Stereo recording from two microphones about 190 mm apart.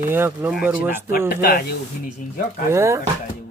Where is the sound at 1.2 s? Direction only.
50° left (ahead or behind).